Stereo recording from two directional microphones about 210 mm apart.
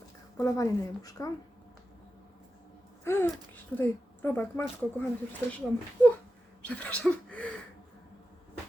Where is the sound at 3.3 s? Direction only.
10° left (ahead or behind).